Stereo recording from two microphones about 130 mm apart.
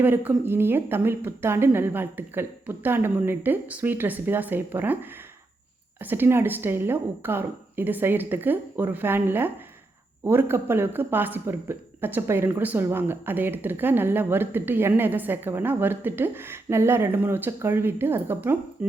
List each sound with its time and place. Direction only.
0.0 s speech: 15° right (ahead or behind)
6.0 s speech: 15° right (ahead or behind)